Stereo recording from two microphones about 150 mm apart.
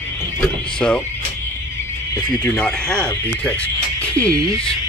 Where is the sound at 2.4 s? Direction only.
5° left (ahead or behind).